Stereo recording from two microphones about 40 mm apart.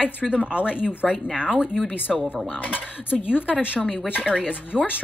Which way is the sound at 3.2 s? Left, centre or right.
Left.